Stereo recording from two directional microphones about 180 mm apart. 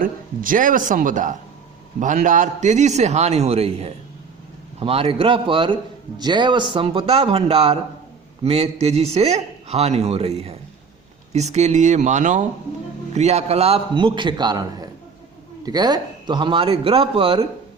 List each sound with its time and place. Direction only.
0.0 s speech: 50° right (ahead or behind); by 17.4 s 30° right (ahead or behind)